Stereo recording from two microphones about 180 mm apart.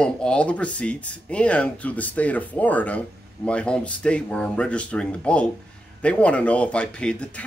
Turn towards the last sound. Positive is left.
turn(degrees=5)  # may be behind; listen again after turning